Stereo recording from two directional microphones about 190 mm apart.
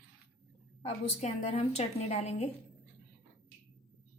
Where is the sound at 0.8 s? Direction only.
35° left (ahead or behind).